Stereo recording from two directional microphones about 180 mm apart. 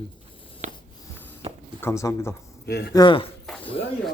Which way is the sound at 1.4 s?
35° right (ahead or behind).